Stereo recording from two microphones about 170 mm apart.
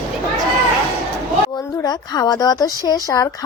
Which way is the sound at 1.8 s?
25° left (ahead or behind).